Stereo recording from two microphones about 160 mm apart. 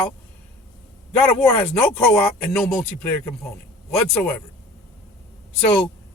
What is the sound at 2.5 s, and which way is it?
Speech, 5° left (ahead or behind).